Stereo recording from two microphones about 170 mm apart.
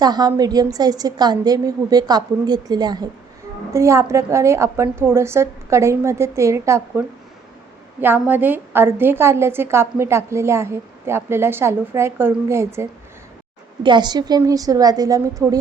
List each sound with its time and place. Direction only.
0.0 s a woman's voice: 25° right (ahead or behind)
8.0 s a woman's voice: 10° right (ahead or behind)
13.8 s a woman's voice: 25° right (ahead or behind)